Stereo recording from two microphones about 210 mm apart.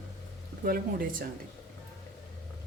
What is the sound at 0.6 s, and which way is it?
Speech, 45° right (ahead or behind).